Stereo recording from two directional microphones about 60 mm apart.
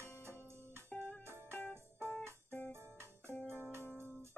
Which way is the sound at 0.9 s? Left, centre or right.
Centre.